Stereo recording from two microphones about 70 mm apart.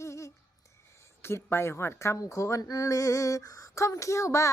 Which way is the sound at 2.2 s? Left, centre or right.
Left.